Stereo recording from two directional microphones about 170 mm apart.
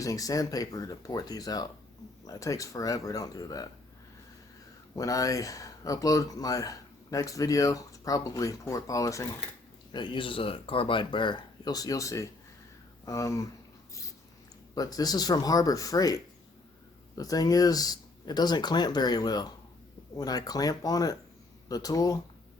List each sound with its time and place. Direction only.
0.0 s speech: 20° left (ahead or behind)
4.9 s speech: 20° left (ahead or behind)
14.8 s speech: 20° left (ahead or behind)